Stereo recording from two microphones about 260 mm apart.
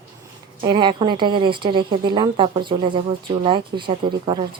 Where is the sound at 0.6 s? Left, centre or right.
Centre.